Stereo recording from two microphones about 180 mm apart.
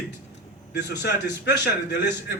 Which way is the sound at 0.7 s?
70° left (ahead or behind).